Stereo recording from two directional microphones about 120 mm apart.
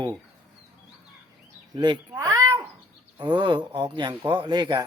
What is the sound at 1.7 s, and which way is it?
Speech, 40° right (ahead or behind).